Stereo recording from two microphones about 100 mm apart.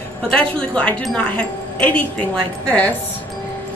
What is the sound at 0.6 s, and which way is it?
A woman's voice, 10° left (ahead or behind).